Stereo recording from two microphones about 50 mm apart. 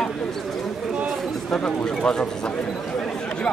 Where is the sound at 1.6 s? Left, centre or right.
Centre.